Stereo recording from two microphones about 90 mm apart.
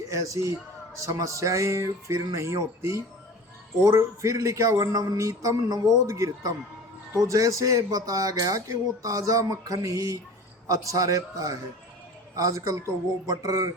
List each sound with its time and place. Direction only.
0.1 s speech: 35° right (ahead or behind)